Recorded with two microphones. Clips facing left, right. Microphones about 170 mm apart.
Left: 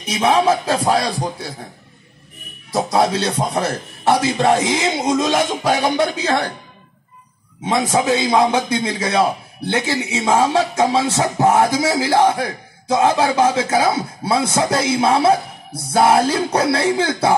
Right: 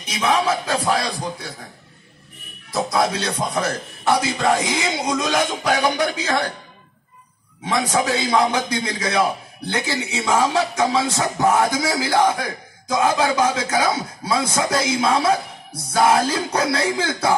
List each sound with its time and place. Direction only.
0.1 s a man's voice: 30° left (ahead or behind)
2.7 s a man's voice: 30° left (ahead or behind)
7.6 s a man's voice: 20° left (ahead or behind)